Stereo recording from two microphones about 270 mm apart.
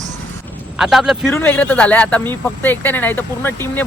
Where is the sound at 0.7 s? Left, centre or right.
Centre.